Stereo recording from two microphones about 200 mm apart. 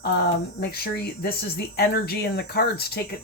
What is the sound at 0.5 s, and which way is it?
Speech, 50° left (ahead or behind).